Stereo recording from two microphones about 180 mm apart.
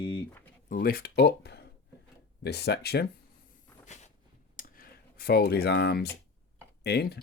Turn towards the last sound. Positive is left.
turn(degrees=60)  # may be behind; listen again after turning